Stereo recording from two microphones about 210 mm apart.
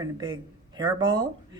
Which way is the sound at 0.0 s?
20° right (ahead or behind).